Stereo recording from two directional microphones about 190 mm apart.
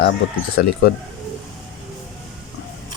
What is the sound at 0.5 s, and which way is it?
Speech, 55° left (ahead or behind).